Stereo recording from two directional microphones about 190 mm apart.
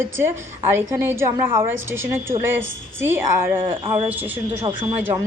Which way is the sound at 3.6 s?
25° right (ahead or behind).